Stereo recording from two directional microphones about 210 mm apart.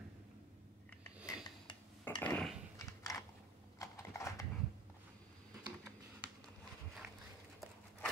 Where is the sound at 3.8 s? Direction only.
15° left (ahead or behind).